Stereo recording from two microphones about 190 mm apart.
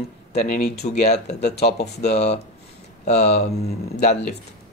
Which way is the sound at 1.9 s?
35° left (ahead or behind).